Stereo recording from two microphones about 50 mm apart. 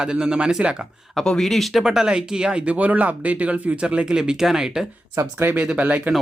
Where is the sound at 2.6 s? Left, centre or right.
Right; by 4.9 s centre.